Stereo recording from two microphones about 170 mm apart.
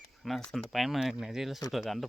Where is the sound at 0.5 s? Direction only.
Centre (ahead or behind).